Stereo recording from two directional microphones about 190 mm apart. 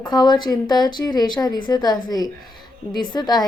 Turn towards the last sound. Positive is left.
turn(degrees=20)  # may be behind; listen again after turning